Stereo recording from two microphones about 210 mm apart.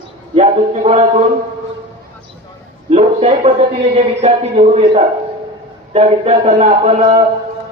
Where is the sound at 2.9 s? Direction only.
30° right (ahead or behind).